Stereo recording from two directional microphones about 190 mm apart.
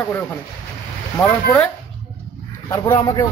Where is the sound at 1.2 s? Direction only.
15° left (ahead or behind).